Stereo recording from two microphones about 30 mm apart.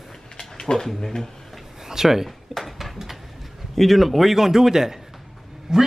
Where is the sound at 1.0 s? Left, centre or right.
Centre.